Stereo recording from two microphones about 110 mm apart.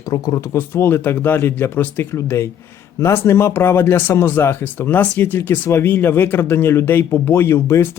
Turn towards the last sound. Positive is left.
turn(degrees=25)  # may be behind; listen again after turning